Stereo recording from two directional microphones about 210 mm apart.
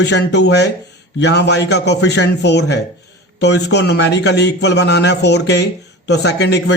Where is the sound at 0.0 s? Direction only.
55° left (ahead or behind).